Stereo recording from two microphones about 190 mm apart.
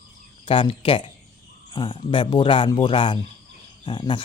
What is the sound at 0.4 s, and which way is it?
Speech, 30° left (ahead or behind).